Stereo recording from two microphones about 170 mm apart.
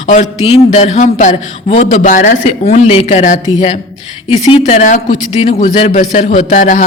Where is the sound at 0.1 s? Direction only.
40° left (ahead or behind).